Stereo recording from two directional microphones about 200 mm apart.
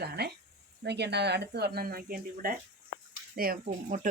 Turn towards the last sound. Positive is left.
turn(degrees=-40)  # may be behind; listen again after turning